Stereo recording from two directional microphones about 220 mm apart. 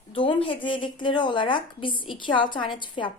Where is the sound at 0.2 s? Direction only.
25° left (ahead or behind).